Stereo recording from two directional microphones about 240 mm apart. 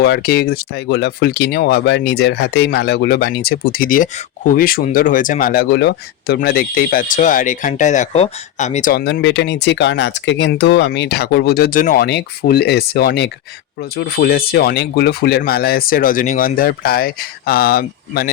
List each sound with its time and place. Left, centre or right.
0.0 s speech: left